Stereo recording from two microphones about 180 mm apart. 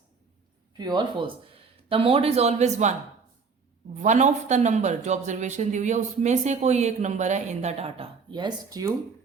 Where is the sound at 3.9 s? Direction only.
40° right (ahead or behind); by 9.0 s 20° right (ahead or behind).